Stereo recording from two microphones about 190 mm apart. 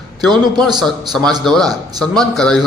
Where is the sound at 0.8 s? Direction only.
Centre (ahead or behind).